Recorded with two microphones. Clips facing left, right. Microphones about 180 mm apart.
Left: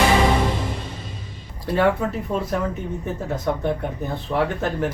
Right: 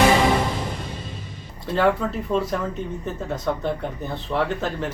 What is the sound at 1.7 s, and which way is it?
Speech, 10° left (ahead or behind).